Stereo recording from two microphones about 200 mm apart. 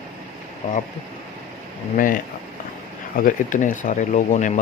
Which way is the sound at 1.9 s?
40° left (ahead or behind).